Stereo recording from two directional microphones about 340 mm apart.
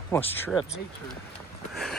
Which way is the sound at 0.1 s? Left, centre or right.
Centre.